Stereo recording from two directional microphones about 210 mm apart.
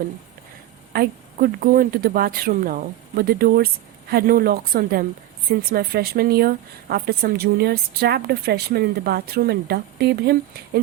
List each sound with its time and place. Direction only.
0.9 s a woman's voice: 40° right (ahead or behind)